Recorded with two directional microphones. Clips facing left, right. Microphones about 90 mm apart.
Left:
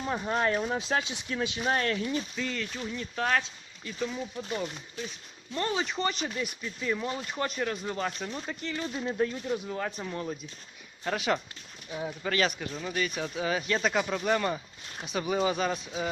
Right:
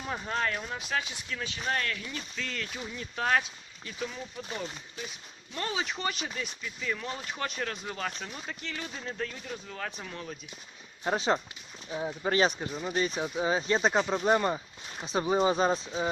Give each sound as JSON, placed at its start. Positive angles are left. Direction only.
{"t": 0.0, "sound": "speech", "side_deg": 5}
{"t": 0.7, "sound": "speech", "side_deg": 25}
{"t": 1.8, "sound": "speech", "side_deg": 30}
{"t": 2.3, "sound": "speech", "side_deg": 5}
{"t": 7.2, "sound": "speech", "side_deg": 0}
{"t": 8.7, "sound": "speech", "side_deg": 15}
{"t": 11.0, "sound": "speech", "side_deg": -25}
{"t": 11.9, "sound": "speech", "side_deg": -15}
{"t": 12.2, "sound": "speech", "side_deg": -30}
{"t": 13.2, "sound": "speech", "side_deg": -15}
{"t": 13.5, "sound": "speech", "side_deg": -25}